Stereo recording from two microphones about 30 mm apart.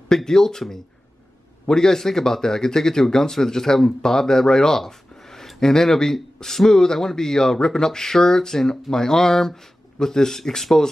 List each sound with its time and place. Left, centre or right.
0.1 s speech: centre